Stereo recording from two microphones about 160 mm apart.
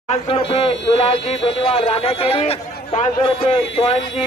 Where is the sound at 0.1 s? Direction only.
35° left (ahead or behind).